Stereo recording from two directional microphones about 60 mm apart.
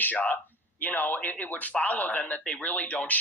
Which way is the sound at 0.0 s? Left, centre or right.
Left.